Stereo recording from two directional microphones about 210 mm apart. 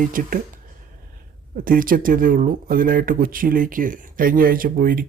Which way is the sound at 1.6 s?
40° right (ahead or behind).